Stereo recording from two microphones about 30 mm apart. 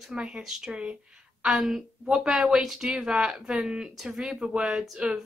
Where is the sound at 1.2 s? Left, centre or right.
Right.